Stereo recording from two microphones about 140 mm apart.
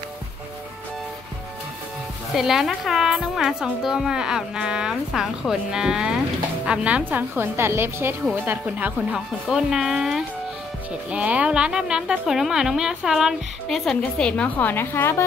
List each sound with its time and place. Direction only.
2.3 s a woman's voice: centre (ahead or behind); by 15.2 s 15° left (ahead or behind)